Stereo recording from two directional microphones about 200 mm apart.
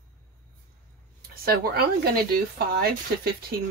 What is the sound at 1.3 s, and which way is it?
Speech, 50° right (ahead or behind).